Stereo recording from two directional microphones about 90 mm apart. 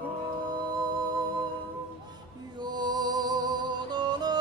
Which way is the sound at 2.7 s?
50° right (ahead or behind).